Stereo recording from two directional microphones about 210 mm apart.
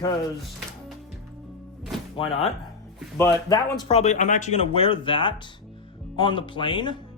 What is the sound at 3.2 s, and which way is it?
Speech, 15° left (ahead or behind).